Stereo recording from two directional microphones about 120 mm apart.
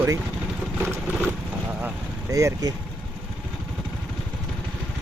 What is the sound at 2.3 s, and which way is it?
Speech, 30° right (ahead or behind).